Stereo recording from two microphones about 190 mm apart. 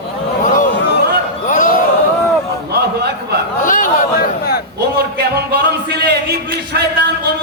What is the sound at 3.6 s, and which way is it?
A man's voice, 45° left (ahead or behind).